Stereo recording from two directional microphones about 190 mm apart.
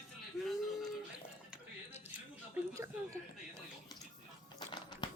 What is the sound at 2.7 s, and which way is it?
Speech, 15° right (ahead or behind).